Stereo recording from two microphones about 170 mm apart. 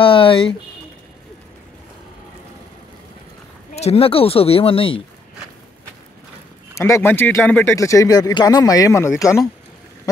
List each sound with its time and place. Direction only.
0.0 s speech: 30° left (ahead or behind)
3.7 s speech: 35° left (ahead or behind)
6.8 s speech: 15° left (ahead or behind)